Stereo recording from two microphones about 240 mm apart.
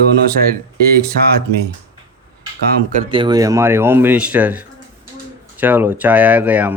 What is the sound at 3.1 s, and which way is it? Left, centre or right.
Speech, centre.